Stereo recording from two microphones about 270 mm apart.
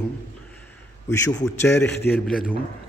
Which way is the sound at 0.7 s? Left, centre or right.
Centre.